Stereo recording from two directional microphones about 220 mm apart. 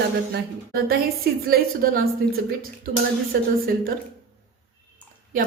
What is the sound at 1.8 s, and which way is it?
Speech, 40° right (ahead or behind).